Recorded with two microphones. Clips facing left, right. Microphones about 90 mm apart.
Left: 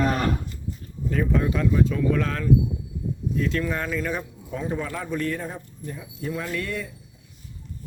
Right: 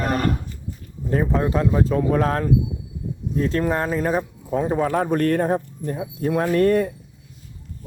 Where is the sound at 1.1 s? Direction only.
35° right (ahead or behind).